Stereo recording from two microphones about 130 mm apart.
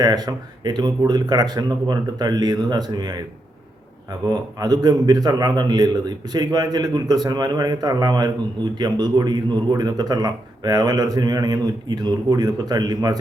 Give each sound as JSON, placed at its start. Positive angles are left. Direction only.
{"t": 0.0, "sound": "speech", "side_deg": -30}